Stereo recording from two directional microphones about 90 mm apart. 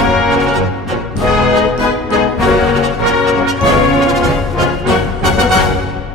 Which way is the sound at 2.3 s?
Centre (ahead or behind).